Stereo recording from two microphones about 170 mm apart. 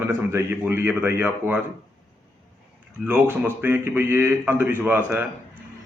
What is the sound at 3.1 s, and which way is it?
A man's voice, 10° right (ahead or behind).